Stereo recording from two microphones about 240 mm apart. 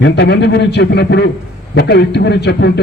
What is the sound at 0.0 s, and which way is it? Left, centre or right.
A man's voice, left.